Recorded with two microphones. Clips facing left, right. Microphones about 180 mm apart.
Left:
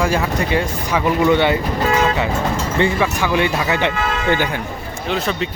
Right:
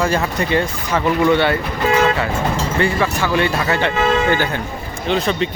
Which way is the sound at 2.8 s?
15° left (ahead or behind).